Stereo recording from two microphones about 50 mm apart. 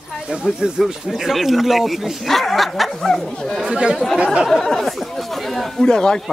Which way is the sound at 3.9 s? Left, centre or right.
Centre.